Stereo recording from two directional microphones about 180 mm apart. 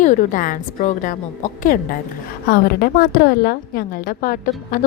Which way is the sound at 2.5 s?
60° left (ahead or behind).